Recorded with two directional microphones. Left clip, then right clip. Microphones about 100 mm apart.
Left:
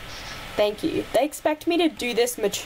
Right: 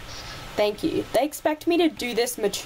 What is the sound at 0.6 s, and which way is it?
Speech, 10° right (ahead or behind).